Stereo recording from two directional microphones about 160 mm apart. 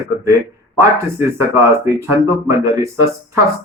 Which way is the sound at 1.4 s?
15° right (ahead or behind).